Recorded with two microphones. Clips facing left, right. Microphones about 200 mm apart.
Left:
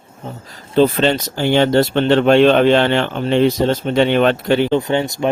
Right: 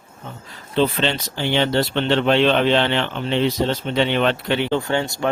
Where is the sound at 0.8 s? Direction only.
45° left (ahead or behind).